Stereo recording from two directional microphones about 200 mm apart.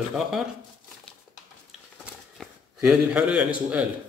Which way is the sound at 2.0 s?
Centre (ahead or behind).